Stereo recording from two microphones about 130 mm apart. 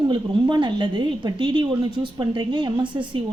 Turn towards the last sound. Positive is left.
turn(degrees=-40)  # may be behind; listen again after turning